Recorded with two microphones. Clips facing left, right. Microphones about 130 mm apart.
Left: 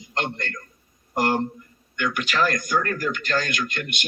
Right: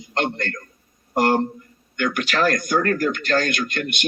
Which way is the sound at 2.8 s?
70° right (ahead or behind).